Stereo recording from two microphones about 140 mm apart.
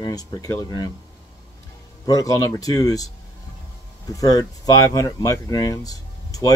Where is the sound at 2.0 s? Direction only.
25° left (ahead or behind).